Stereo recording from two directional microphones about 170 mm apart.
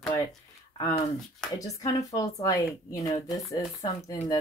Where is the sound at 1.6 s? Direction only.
20° left (ahead or behind).